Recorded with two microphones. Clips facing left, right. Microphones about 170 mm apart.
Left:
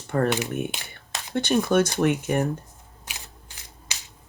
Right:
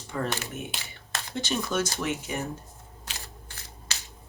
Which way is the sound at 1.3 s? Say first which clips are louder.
Left 8 dB; 60° left (ahead or behind).